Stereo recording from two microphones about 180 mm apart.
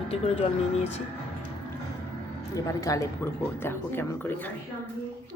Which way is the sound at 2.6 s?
20° left (ahead or behind).